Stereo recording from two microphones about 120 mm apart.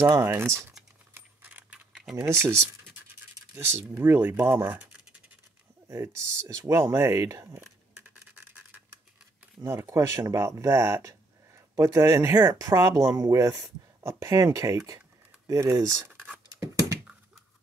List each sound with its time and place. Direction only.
0.0 s speech: 25° right (ahead or behind)
1.1 s keys jangling: 15° right (ahead or behind)
1.9 s typing: centre (ahead or behind)
2.1 s speech: 20° right (ahead or behind)
3.5 s speech: 20° right (ahead or behind)
5.9 s speech: 25° right (ahead or behind)
9.6 s speech: 25° right (ahead or behind)
16.4 s dog: 25° right (ahead or behind)